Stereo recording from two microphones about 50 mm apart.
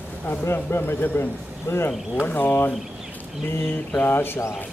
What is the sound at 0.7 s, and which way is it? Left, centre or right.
Speech, left.